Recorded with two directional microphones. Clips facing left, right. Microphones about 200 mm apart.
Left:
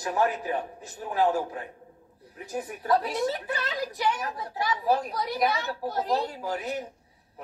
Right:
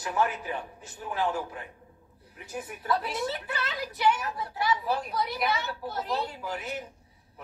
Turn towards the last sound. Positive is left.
turn(degrees=40)  # may be behind; listen again after turning